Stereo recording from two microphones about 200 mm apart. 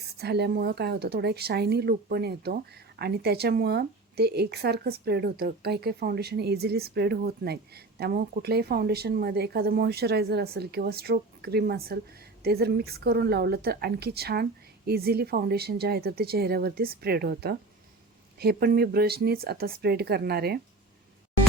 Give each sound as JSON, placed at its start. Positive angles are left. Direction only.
{"t": 0.2, "sound": "speech", "side_deg": -55}